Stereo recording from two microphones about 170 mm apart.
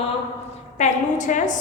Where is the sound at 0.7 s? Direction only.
45° left (ahead or behind).